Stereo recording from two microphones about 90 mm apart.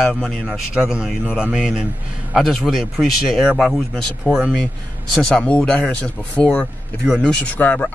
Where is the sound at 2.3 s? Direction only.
Centre (ahead or behind).